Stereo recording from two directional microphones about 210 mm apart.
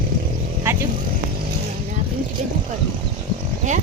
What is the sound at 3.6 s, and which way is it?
Speech, 35° right (ahead or behind).